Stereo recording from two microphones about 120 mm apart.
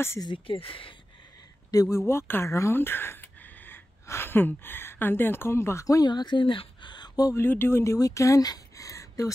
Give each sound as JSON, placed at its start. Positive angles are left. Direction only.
{"t": 0.2, "sound": "speech", "side_deg": 45}
{"t": 1.7, "sound": "speech", "side_deg": 30}
{"t": 7.4, "sound": "speech", "side_deg": 20}